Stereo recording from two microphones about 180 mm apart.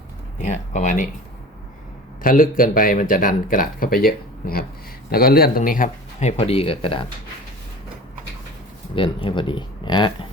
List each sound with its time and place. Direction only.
0.3 s speech: 40° left (ahead or behind)
2.2 s speech: 50° left (ahead or behind); by 7.1 s 30° left (ahead or behind)
9.0 s speech: 30° left (ahead or behind)